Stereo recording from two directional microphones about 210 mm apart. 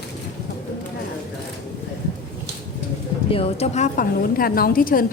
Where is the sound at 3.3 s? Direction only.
25° left (ahead or behind); by 5.0 s 45° left (ahead or behind).